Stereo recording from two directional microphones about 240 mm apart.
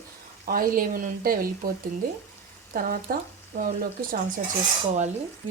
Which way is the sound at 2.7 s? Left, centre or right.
Right.